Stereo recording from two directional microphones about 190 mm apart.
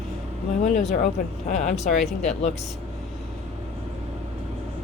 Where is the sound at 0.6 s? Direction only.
40° left (ahead or behind).